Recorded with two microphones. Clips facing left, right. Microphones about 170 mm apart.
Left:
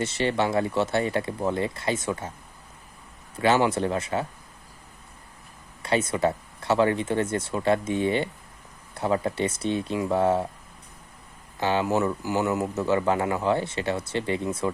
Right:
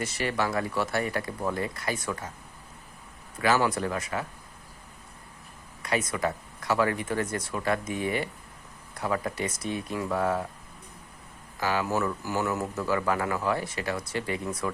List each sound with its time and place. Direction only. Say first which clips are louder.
0.0 s speech: left 4 dB; 25° left (ahead or behind)
3.4 s speech: left 3 dB; 25° left (ahead or behind)
5.8 s speech: left 5 dB; 30° left (ahead or behind)
11.6 s speech: left 4 dB; 25° left (ahead or behind)